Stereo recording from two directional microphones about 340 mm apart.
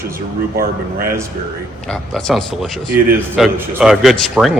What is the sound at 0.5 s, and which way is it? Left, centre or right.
Speech, right.